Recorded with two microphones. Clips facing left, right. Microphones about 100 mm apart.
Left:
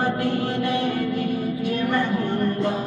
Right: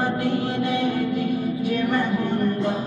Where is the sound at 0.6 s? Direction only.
55° left (ahead or behind).